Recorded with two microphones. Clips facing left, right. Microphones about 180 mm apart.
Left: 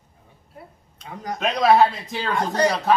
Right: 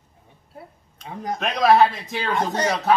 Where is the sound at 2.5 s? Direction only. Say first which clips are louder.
Left 2 dB; 20° right (ahead or behind).